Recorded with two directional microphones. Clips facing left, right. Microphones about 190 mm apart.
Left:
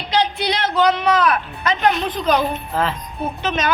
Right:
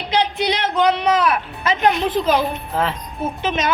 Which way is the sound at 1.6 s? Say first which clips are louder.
Right 1 dB; 20° right (ahead or behind).